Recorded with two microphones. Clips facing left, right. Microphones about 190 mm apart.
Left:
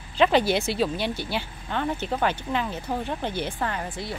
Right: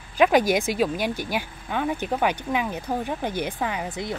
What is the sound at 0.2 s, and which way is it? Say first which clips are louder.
Speech: right 2 dB; 10° right (ahead or behind).